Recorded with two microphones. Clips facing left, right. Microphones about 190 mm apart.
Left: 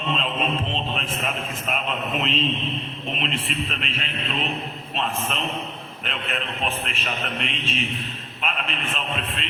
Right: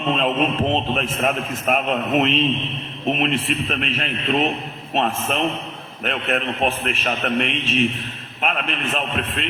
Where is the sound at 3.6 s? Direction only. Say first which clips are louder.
Right 7 dB; 50° right (ahead or behind).